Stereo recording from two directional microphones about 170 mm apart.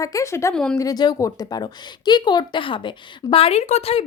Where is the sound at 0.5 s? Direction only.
5° left (ahead or behind).